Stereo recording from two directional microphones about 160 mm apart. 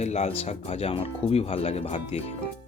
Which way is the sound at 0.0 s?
45° left (ahead or behind).